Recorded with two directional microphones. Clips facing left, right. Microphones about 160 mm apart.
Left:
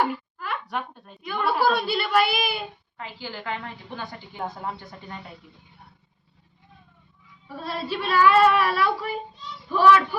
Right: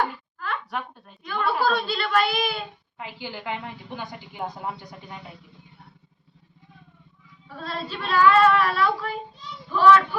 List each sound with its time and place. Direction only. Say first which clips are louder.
0.0 s a sound: left 2 dB; 10° left (ahead or behind)
0.7 s a woman's voice: left 1 dB; centre (ahead or behind)
1.2 s a child's voice: left 1 dB; 10° left (ahead or behind)
3.0 s a woman's voice: right 1 dB; 15° right (ahead or behind)
7.4 s child singing: left 2 dB; 10° left (ahead or behind)